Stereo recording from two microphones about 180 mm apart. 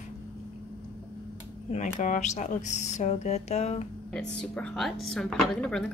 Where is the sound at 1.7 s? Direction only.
45° left (ahead or behind).